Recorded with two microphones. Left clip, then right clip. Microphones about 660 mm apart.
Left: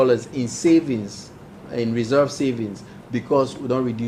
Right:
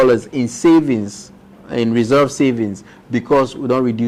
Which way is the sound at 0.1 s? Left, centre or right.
Right.